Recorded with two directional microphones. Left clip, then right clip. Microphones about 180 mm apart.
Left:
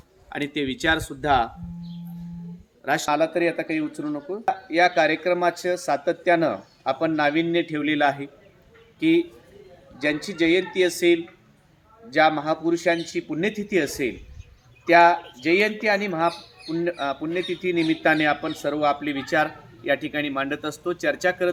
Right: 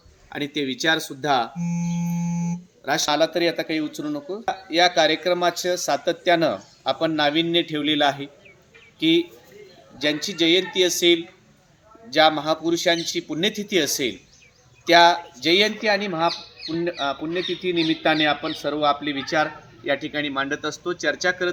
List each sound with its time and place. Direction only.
0.3 s speech: 5° right (ahead or behind)
2.8 s a man's voice: centre (ahead or behind); by 21.5 s 25° left (ahead or behind)